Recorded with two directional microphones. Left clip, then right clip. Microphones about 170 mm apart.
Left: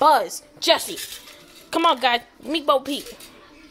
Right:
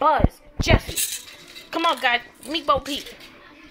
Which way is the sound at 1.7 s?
50° left (ahead or behind).